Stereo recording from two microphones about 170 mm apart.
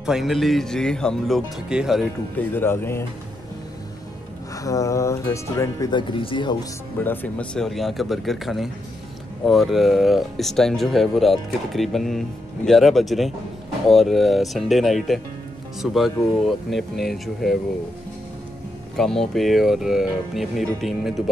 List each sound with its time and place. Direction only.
0.0 s speech: centre (ahead or behind)
2.3 s speech: 15° left (ahead or behind)
4.6 s speech: 20° left (ahead or behind)
7.0 s speech: 10° left (ahead or behind)
18.9 s speech: centre (ahead or behind)